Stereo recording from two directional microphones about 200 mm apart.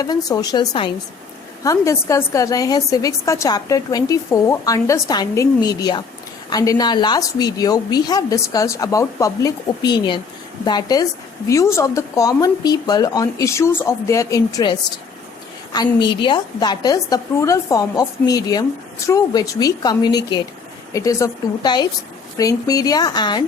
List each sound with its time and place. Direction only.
0.0 s a woman's voice: 20° left (ahead or behind)